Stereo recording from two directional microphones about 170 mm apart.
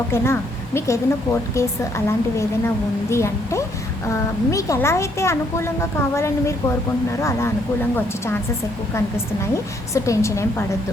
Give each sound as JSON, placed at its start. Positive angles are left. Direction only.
{"t": 0.1, "sound": "a woman's voice", "side_deg": 15}